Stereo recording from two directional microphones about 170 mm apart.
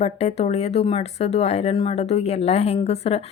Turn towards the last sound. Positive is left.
turn(degrees=35)  # may be behind; listen again after turning